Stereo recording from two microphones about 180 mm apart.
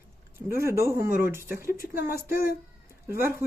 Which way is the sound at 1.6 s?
55° left (ahead or behind).